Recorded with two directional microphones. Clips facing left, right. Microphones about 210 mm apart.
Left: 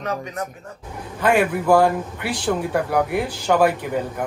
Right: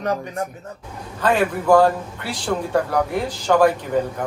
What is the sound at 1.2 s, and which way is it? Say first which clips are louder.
Speech: left 1 dB; 10° left (ahead or behind).